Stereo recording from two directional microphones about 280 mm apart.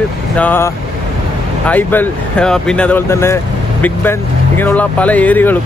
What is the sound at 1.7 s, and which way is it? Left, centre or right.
Speech, centre.